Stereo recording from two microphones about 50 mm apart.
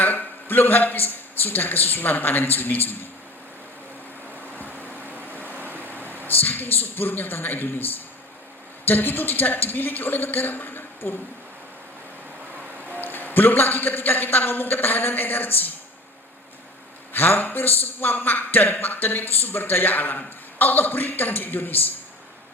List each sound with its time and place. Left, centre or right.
0.0 s a man's voice: left
4.7 s vehicle: right
6.2 s a man's voice: left
13.0 s a man's voice: left
17.1 s a man's voice: left